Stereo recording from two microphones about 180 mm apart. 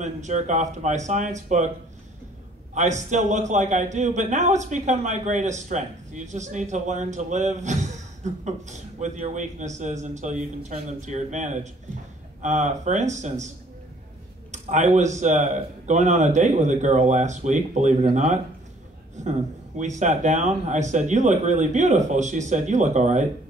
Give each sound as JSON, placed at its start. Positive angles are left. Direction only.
{"t": 0.0, "sound": "a man's voice", "side_deg": -40}
{"t": 2.7, "sound": "a man's voice", "side_deg": -40}
{"t": 14.5, "sound": "a man's voice", "side_deg": -40}
{"t": 19.8, "sound": "a man's voice", "side_deg": -40}